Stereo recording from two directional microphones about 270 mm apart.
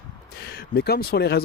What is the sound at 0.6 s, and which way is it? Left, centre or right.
Speech, left.